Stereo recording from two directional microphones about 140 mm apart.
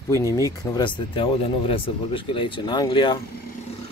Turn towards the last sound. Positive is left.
turn(degrees=30)  # may be behind; listen again after turning